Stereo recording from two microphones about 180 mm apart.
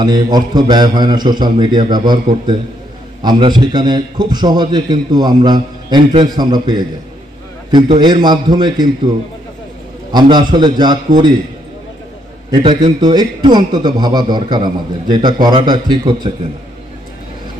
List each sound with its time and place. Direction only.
0.0 s a man's voice: 25° right (ahead or behind)
3.2 s a man's voice: 25° right (ahead or behind)
8.0 s a man's voice: 25° right (ahead or behind)
10.1 s a man's voice: 25° right (ahead or behind)
12.4 s a man's voice: 25° right (ahead or behind)